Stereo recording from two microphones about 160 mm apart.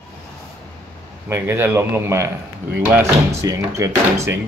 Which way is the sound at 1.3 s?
15° right (ahead or behind).